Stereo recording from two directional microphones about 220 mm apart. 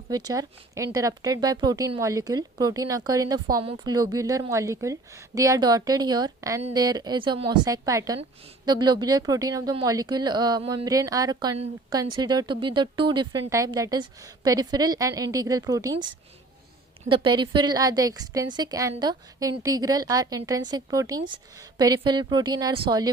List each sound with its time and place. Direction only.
0.1 s a woman's voice: 15° right (ahead or behind)
17.1 s a woman's voice: 20° right (ahead or behind)